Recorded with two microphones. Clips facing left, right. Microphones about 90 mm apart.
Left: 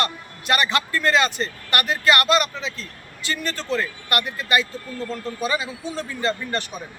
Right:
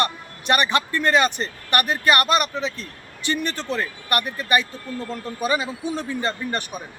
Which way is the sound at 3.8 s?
20° right (ahead or behind).